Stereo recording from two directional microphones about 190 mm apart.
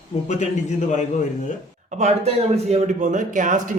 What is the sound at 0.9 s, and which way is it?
Speech, 40° left (ahead or behind).